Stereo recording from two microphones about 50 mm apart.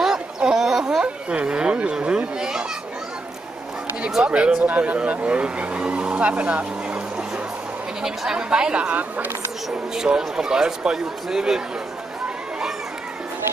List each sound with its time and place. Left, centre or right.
0.0 s a sound: centre
1.0 s speech: right
4.2 s speech: right
8.0 s speech: centre